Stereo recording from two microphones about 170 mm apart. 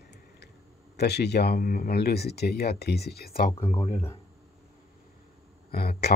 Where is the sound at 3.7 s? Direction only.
35° left (ahead or behind).